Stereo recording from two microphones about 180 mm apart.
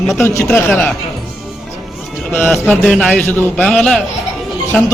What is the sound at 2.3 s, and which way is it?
A man's voice, 5° left (ahead or behind).